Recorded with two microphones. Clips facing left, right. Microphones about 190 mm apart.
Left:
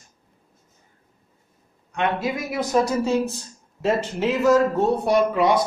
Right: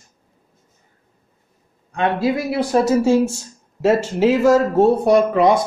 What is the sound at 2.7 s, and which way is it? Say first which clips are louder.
Speech: right 4 dB; 5° right (ahead or behind).